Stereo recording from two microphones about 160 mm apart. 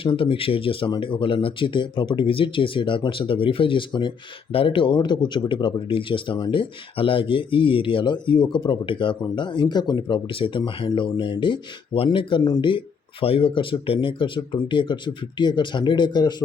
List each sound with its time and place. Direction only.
0.0 s speech: 35° left (ahead or behind)